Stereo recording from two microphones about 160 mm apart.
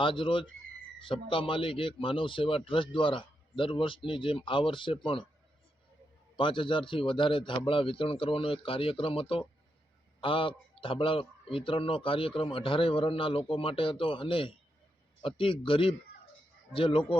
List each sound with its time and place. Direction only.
0.0 s a man's voice: 35° left (ahead or behind)
6.3 s a man's voice: 30° left (ahead or behind)